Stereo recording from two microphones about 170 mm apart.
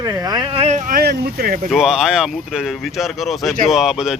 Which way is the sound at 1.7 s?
5° right (ahead or behind).